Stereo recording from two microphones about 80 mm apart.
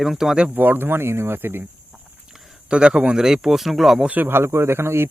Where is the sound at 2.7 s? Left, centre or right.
Centre.